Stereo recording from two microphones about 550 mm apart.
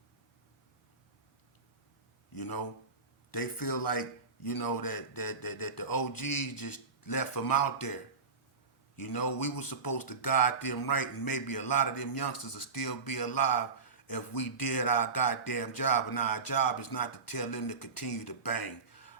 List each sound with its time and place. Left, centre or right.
2.3 s speech: left
9.0 s speech: left